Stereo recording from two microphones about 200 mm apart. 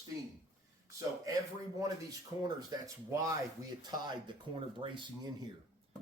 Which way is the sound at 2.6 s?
20° right (ahead or behind).